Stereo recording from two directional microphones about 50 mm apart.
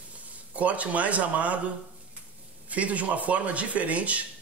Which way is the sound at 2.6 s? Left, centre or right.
Right.